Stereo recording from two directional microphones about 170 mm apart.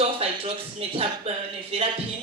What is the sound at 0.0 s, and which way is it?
Speech, 35° right (ahead or behind).